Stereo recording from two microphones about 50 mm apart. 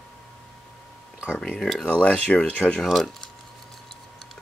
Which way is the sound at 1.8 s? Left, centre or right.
Left.